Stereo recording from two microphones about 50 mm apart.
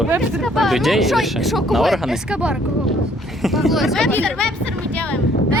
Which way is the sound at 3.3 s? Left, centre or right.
Centre.